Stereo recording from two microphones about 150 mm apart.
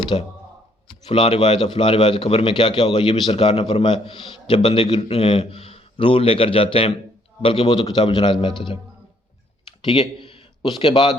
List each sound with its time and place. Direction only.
0.1 s a man's voice: 30° left (ahead or behind)
0.9 s a man's voice: 40° left (ahead or behind)
9.8 s speech: 40° left (ahead or behind)